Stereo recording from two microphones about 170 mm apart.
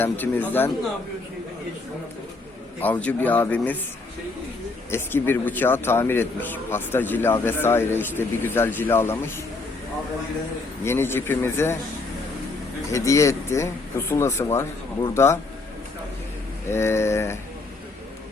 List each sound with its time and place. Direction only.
0.0 s a man's voice: 10° left (ahead or behind)
2.8 s a man's voice: 10° left (ahead or behind)
4.9 s a man's voice: 15° left (ahead or behind)
10.8 s a man's voice: 15° left (ahead or behind)
12.9 s a man's voice: 20° left (ahead or behind)
16.6 s a man's voice: 15° left (ahead or behind)